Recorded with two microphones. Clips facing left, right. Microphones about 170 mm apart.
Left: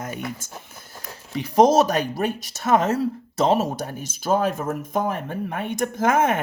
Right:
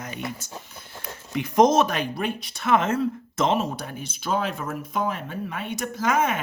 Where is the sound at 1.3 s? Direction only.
35° left (ahead or behind).